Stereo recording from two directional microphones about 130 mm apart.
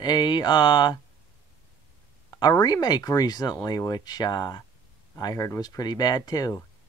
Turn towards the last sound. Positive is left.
turn(degrees=30)  # may be behind; listen again after turning